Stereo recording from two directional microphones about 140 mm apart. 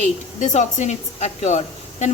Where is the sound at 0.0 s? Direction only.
55° left (ahead or behind).